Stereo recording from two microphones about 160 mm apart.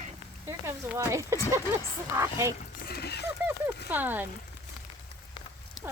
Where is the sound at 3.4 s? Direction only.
10° right (ahead or behind).